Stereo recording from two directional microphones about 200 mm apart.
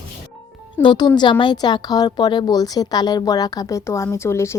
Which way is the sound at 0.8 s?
25° left (ahead or behind).